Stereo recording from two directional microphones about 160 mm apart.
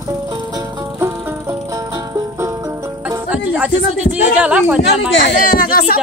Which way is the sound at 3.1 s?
10° right (ahead or behind).